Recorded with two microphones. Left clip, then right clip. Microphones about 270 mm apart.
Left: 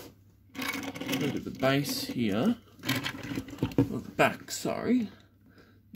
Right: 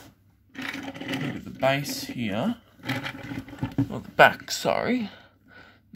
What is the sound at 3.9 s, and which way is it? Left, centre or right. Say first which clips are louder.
Speech: right 13 dB; right.